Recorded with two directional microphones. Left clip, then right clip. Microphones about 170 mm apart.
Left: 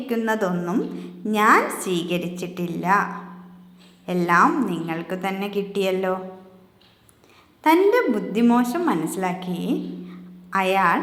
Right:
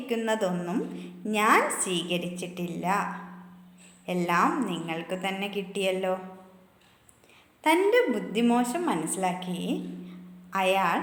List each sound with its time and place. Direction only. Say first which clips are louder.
0.1 s a woman's voice: left 4 dB; 10° right (ahead or behind)
7.6 s a woman's voice: left 5 dB; 5° right (ahead or behind)